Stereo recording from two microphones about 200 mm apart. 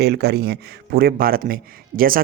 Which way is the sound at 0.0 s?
55° right (ahead or behind).